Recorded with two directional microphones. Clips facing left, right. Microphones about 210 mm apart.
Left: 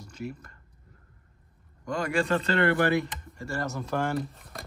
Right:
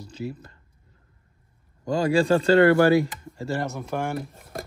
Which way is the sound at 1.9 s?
30° right (ahead or behind).